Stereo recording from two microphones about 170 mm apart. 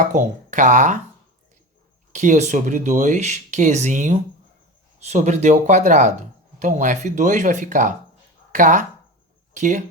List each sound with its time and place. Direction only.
0.0 s speech: 45° right (ahead or behind)
2.1 s speech: 45° right (ahead or behind)